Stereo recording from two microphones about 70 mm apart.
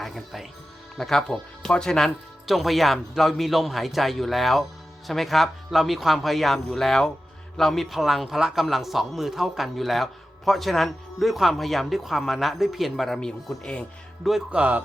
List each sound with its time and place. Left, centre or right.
0.0 s a man's voice: centre
14.5 s speech: right